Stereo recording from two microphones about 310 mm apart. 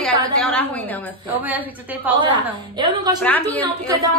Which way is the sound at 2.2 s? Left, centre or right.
Centre.